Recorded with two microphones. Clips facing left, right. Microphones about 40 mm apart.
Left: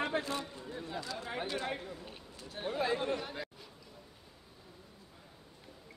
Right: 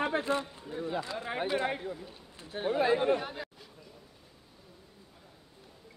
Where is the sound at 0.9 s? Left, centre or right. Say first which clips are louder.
Right 3 dB; right.